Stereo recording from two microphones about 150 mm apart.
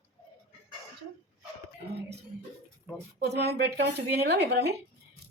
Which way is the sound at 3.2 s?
90° right.